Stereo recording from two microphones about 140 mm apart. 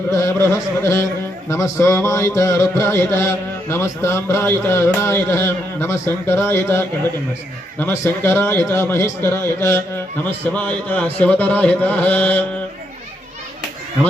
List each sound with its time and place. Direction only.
0.1 s music: 20° left (ahead or behind)
4.9 s a man's voice: 20° left (ahead or behind)